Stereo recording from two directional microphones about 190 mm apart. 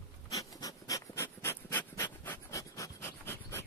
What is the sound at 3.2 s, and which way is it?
Filing, 10° left (ahead or behind).